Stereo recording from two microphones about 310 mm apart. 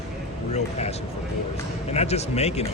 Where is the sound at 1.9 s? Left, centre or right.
Left.